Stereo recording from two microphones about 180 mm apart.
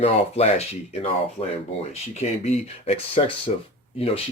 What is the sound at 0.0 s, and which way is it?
Speech, 35° left (ahead or behind).